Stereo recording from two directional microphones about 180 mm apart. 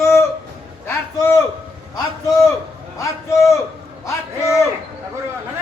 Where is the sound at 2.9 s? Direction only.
15° left (ahead or behind).